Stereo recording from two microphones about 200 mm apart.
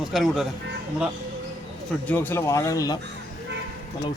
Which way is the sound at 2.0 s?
10° left (ahead or behind).